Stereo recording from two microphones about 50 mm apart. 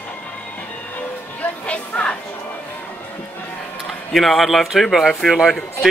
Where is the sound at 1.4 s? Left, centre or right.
Left.